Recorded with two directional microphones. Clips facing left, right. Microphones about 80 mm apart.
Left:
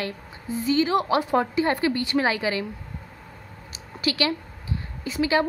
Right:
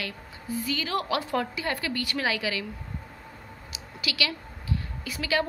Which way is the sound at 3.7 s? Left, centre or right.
Left.